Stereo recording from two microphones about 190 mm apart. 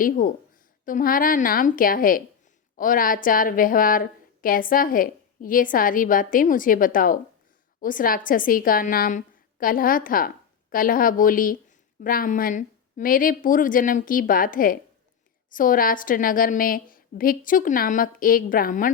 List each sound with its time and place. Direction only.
0.9 s a woman's voice: 45° left (ahead or behind)